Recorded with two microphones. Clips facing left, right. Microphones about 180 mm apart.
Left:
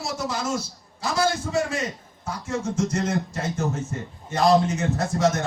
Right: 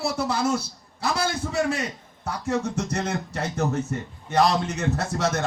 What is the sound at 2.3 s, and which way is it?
A man's voice, 65° right (ahead or behind).